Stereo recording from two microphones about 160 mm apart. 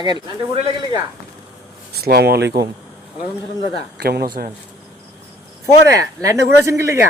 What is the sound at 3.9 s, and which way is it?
Speech, 80° right.